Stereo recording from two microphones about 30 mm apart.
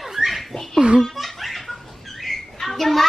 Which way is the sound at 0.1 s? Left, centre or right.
Centre.